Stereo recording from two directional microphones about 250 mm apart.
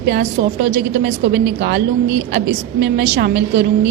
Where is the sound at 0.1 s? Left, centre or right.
Right.